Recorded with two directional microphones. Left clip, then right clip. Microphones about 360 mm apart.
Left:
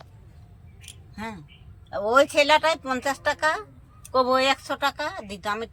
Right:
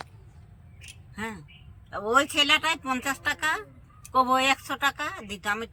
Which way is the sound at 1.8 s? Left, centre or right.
Centre.